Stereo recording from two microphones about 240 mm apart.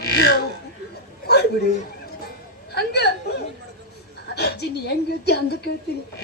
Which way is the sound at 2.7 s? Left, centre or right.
Left.